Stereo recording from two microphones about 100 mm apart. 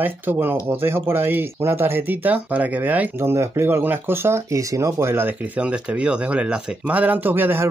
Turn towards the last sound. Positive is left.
turn(degrees=-20)  # may be behind; listen again after turning